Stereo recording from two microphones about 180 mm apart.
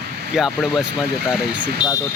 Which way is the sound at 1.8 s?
25° left (ahead or behind).